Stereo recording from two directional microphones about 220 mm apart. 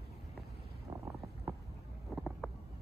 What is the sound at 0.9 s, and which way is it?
Boat, 20° right (ahead or behind).